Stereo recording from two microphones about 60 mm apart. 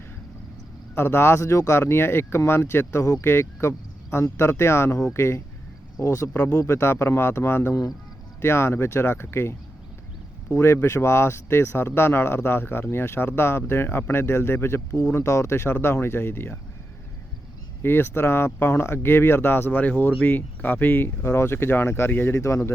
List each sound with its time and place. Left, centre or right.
0.9 s speech: left
17.8 s speech: left
19.7 s speech: left
21.2 s speech: left
22.4 s speech: left